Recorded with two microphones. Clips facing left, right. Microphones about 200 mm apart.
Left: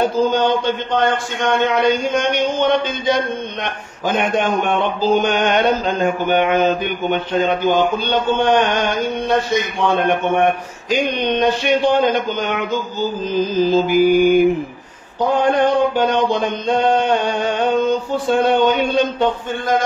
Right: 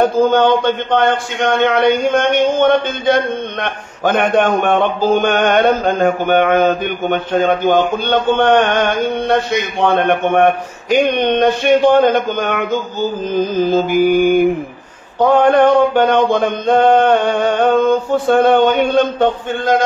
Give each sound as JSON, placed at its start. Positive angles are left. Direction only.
{"t": 0.0, "sound": "mantra", "side_deg": -55}